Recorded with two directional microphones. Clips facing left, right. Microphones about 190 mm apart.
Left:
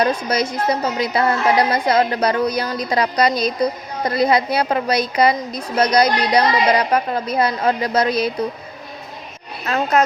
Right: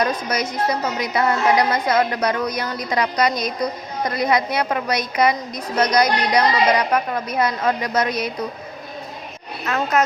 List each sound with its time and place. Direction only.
0.0 s a woman's voice: 30° left (ahead or behind)
9.6 s a woman's voice: 30° left (ahead or behind)